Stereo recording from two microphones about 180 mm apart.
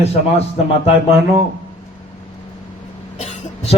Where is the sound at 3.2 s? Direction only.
40° left (ahead or behind).